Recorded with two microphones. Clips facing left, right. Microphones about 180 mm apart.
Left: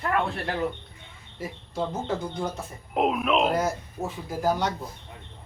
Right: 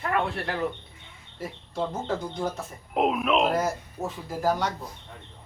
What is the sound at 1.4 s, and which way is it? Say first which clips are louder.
Speech: even; centre (ahead or behind).